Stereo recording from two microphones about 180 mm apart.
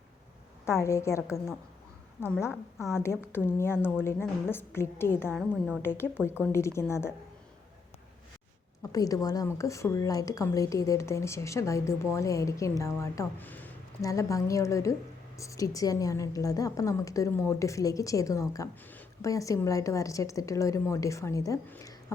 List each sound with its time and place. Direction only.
0.6 s a woman's voice: 15° left (ahead or behind)
5.4 s a woman's voice: 5° right (ahead or behind)
5.8 s a woman's voice: 10° left (ahead or behind)
8.8 s a woman's voice: 20° left (ahead or behind)